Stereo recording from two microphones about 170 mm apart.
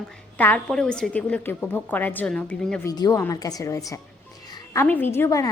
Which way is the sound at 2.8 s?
20° left (ahead or behind).